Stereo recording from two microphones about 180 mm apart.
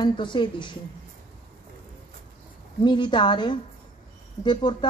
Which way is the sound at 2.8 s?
25° left (ahead or behind).